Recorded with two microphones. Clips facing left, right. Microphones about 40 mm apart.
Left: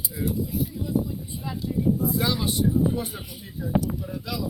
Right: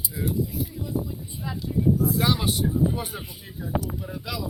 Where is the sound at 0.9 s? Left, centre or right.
Centre.